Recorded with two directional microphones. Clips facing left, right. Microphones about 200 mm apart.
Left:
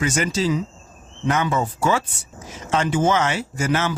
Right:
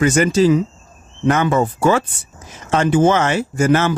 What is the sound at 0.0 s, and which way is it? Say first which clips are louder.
Speech: right 8 dB; 55° right (ahead or behind).